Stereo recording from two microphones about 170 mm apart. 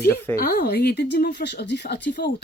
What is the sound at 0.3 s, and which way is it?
Speech, 70° left (ahead or behind).